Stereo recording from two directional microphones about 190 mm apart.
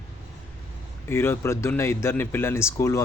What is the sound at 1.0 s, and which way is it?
Speech, 10° left (ahead or behind).